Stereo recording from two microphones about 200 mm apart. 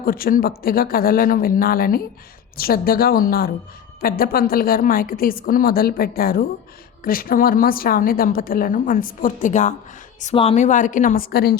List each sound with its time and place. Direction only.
0.0 s a woman's voice: 45° left (ahead or behind)